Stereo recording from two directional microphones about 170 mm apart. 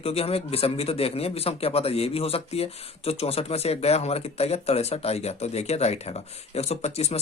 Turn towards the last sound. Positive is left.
turn(degrees=40)  # may be behind; listen again after turning